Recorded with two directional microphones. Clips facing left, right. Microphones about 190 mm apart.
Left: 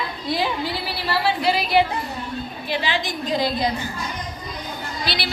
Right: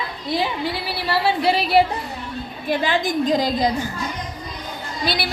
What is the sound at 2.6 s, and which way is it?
A woman's voice, 50° right (ahead or behind).